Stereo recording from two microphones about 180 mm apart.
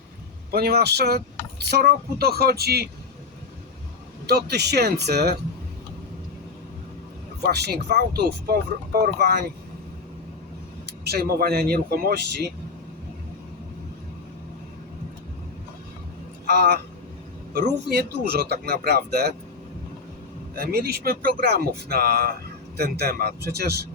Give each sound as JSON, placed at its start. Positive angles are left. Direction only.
{"t": 0.5, "sound": "speech", "side_deg": -60}
{"t": 4.3, "sound": "speech", "side_deg": -65}
{"t": 7.4, "sound": "speech", "side_deg": -65}
{"t": 11.0, "sound": "speech", "side_deg": -60}
{"t": 16.5, "sound": "a man's voice", "side_deg": -65}
{"t": 20.6, "sound": "speech", "side_deg": -55}